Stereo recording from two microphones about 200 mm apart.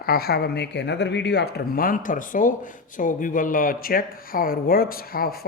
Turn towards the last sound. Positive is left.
turn(degrees=50)  # may be behind; listen again after turning